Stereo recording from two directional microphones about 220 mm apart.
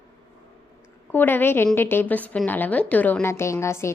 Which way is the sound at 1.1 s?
10° left (ahead or behind).